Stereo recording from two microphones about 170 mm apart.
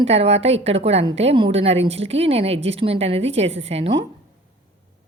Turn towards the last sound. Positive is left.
turn(degrees=-35)  # may be behind; listen again after turning